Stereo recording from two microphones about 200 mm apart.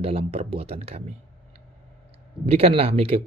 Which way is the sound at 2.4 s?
30° right (ahead or behind).